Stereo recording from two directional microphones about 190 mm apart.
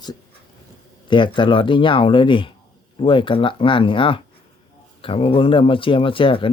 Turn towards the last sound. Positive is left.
turn(degrees=25)  # may be behind; listen again after turning